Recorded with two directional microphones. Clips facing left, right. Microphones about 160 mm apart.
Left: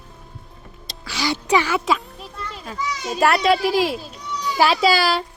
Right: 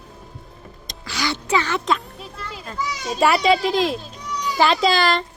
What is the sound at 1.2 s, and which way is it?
A child's voice, 15° left (ahead or behind).